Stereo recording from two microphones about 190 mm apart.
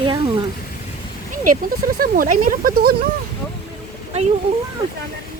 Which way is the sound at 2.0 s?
45° right (ahead or behind).